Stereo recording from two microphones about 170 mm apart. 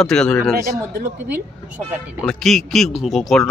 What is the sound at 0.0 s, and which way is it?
Speech, 5° left (ahead or behind).